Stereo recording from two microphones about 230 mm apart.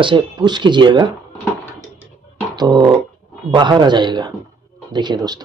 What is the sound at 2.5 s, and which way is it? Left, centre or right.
Speech, centre.